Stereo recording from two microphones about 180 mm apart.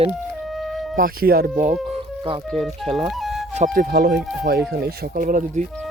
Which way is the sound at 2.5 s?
Centre (ahead or behind).